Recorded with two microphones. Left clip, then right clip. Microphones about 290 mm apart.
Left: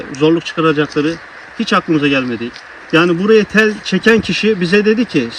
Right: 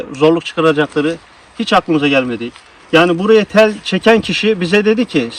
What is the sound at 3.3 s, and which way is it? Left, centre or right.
Speech, right.